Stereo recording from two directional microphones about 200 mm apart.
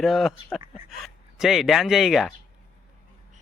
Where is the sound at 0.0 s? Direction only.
Centre (ahead or behind).